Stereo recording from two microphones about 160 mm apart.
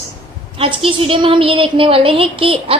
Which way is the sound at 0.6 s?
35° right (ahead or behind).